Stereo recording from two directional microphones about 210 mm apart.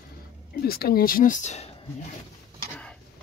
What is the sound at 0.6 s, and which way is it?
Speech, 45° left (ahead or behind).